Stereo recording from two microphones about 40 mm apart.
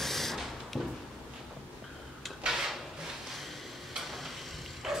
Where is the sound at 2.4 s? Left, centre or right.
Centre.